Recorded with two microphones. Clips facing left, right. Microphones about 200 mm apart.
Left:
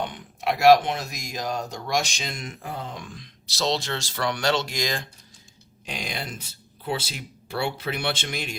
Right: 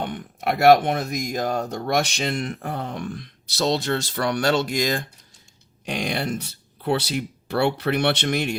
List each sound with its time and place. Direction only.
0.0 s speech: 55° right (ahead or behind)
5.8 s speech: 65° right (ahead or behind)